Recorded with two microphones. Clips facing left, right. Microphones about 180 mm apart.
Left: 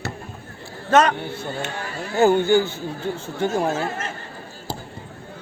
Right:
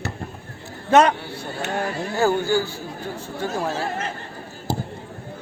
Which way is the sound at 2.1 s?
20° left (ahead or behind).